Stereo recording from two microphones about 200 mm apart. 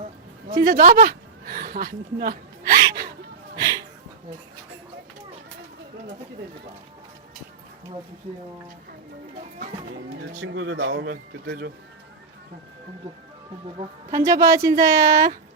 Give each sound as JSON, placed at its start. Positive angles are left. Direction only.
{"t": 0.6, "sound": "speech", "side_deg": -45}
{"t": 10.4, "sound": "speech", "side_deg": -90}
{"t": 14.1, "sound": "a woman's voice", "side_deg": -15}